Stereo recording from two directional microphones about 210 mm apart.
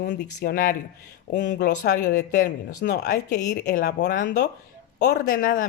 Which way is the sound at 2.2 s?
40° left (ahead or behind).